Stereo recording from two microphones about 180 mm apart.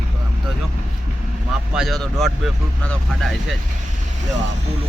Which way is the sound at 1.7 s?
Centre (ahead or behind).